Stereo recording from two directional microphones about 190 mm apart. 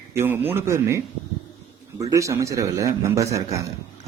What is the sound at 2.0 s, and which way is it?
Speech, 15° right (ahead or behind).